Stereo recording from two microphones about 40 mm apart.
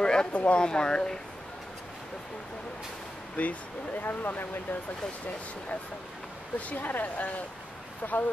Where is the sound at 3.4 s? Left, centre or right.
Left.